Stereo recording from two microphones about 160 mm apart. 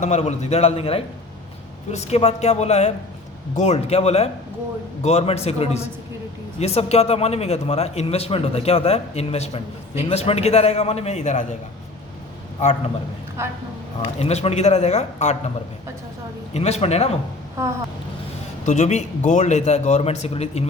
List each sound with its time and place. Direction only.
0.0 s a man's voice: 45° left (ahead or behind)
13.4 s speech: 15° right (ahead or behind)
14.0 s a man's voice: 40° left (ahead or behind)
16.6 s a man's voice: 40° left (ahead or behind)
18.6 s a man's voice: 50° left (ahead or behind)